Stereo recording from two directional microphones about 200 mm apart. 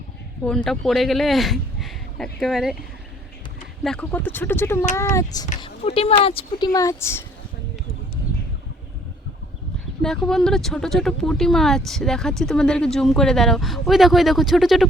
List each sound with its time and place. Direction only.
0.4 s speech: 5° left (ahead or behind)
3.8 s speech: 5° left (ahead or behind)
5.6 s speech: 30° left (ahead or behind)
6.7 s speech: 15° left (ahead or behind)
10.0 s speech: 5° left (ahead or behind)